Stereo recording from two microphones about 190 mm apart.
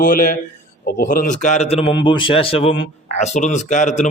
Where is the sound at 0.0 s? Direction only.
45° left (ahead or behind).